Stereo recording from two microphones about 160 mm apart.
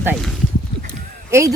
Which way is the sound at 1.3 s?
20° right (ahead or behind).